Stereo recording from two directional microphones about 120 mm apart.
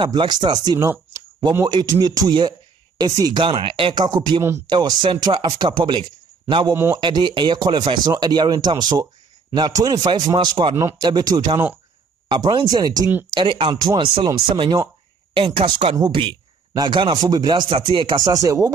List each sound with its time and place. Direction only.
0.0 s speech: 40° right (ahead or behind)
4.4 s speech: 25° right (ahead or behind)
4.6 s speech: 40° right (ahead or behind)
6.7 s speech: 20° right (ahead or behind)
7.0 s speech: 40° right (ahead or behind)
10.8 s speech: 25° right (ahead or behind)
13.3 s speech: 45° right (ahead or behind)
18.1 s speech: 30° right (ahead or behind)